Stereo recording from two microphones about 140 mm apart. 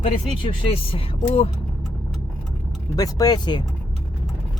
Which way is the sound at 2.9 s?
25° left (ahead or behind).